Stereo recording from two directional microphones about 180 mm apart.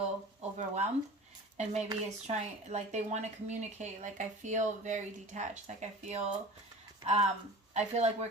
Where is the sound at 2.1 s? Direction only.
35° right (ahead or behind).